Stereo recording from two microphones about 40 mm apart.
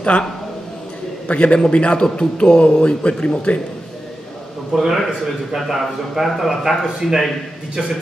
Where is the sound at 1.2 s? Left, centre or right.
Left.